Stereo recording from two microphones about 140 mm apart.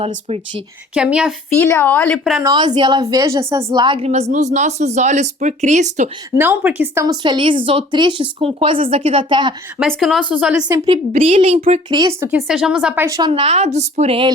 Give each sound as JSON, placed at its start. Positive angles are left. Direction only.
{"t": 0.9, "sound": "speech", "side_deg": -5}
{"t": 1.5, "sound": "a woman's voice", "side_deg": 20}
{"t": 2.5, "sound": "speech", "side_deg": -30}
{"t": 4.0, "sound": "speech", "side_deg": -50}
{"t": 6.3, "sound": "speech", "side_deg": -15}
{"t": 7.0, "sound": "speech", "side_deg": -30}
{"t": 9.8, "sound": "speech", "side_deg": 0}
{"t": 10.8, "sound": "a woman's voice", "side_deg": -50}
{"t": 11.9, "sound": "speech", "side_deg": -30}
{"t": 12.2, "sound": "speech", "side_deg": -15}
{"t": 12.5, "sound": "speech", "side_deg": -5}
{"t": 13.0, "sound": "a woman's voice", "side_deg": -25}
{"t": 13.3, "sound": "a woman's voice", "side_deg": -45}